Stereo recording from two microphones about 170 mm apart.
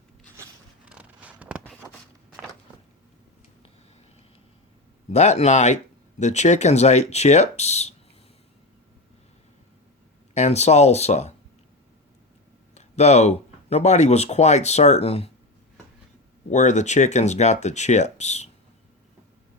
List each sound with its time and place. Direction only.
0.9 s zipper: 5° right (ahead or behind)
5.1 s speech: 40° left (ahead or behind)
10.3 s speech: 40° left (ahead or behind)
12.7 s speech: 40° left (ahead or behind)
16.5 s speech: 45° left (ahead or behind)